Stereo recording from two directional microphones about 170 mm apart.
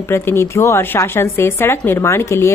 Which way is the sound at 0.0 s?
15° left (ahead or behind).